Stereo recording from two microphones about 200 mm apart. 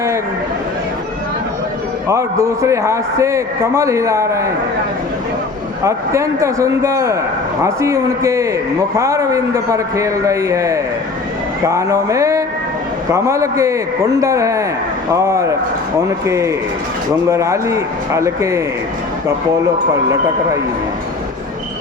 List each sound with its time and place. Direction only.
2.0 s a man's voice: 15° right (ahead or behind)
5.8 s a man's voice: 15° right (ahead or behind)